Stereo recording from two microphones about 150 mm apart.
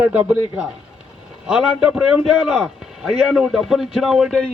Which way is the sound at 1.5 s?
5° right (ahead or behind).